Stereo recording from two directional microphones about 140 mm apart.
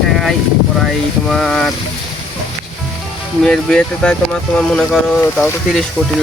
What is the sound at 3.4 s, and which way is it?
Speech, 5° left (ahead or behind).